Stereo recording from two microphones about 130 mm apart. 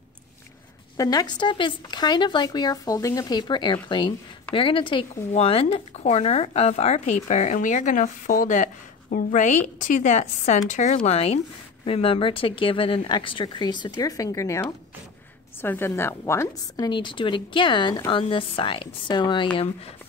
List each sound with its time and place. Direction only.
0.9 s speech: 30° left (ahead or behind); by 8.6 s 85° left
9.1 s a woman's voice: 75° left (ahead or behind)
11.1 s speech: 50° left (ahead or behind); by 14.6 s 25° left (ahead or behind)
15.6 s speech: 15° left (ahead or behind); by 19.4 s 35° left (ahead or behind)